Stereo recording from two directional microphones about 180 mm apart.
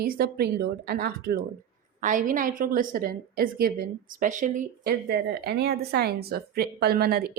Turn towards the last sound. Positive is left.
turn(degrees=-60)  # may be behind; listen again after turning